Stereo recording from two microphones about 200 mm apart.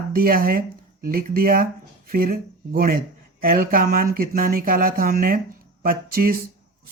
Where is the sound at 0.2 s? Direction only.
45° right (ahead or behind).